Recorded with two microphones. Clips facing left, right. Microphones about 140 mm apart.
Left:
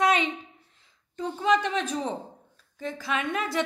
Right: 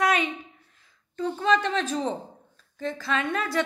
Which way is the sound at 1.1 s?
15° left (ahead or behind).